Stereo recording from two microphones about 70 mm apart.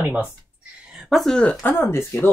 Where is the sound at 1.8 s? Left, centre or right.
Left.